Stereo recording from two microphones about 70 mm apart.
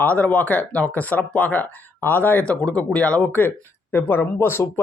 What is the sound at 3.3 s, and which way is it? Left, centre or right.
Speech, left.